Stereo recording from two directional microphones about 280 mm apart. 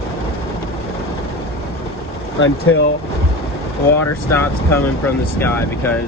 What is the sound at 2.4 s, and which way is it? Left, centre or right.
Speech, left.